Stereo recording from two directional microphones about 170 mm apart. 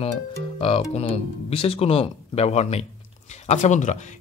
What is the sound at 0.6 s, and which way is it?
Speech, 35° left (ahead or behind).